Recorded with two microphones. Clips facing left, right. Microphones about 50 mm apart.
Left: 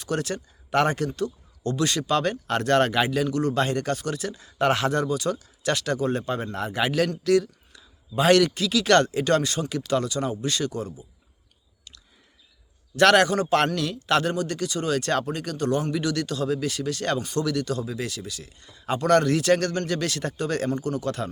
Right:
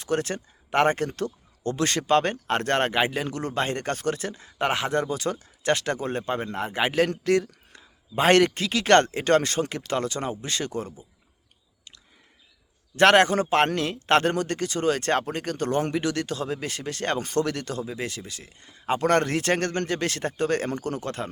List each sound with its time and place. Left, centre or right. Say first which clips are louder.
0.0 s speech: right 1 dB; right
13.0 s a man's voice: even; right